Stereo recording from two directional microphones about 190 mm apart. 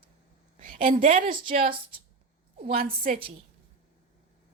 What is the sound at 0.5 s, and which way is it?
Speech, 45° right (ahead or behind).